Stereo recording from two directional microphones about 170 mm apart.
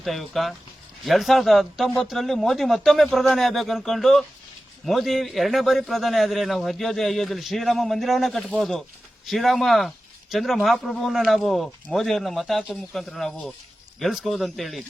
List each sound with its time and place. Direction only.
0.0 s speech: centre (ahead or behind)